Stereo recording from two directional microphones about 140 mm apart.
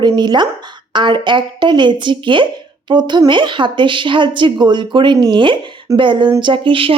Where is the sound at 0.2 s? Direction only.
30° right (ahead or behind).